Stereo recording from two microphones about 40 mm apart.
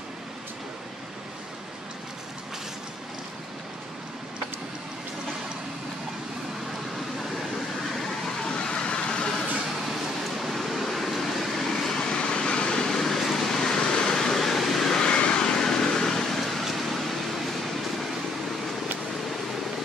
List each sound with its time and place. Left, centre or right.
8.5 s vehicle: left
10.4 s a sound: centre
11.6 s vehicle: centre
15.0 s vehicle: left; by 17.7 s centre